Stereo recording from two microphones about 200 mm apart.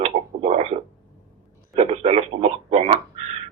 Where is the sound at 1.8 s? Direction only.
30° right (ahead or behind).